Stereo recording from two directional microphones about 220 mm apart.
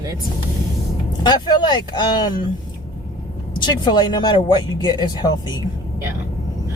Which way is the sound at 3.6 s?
20° left (ahead or behind).